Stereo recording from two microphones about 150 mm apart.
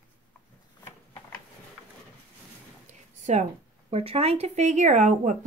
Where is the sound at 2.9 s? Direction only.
50° right (ahead or behind).